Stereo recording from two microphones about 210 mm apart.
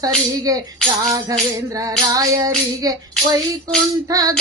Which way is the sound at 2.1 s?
15° right (ahead or behind).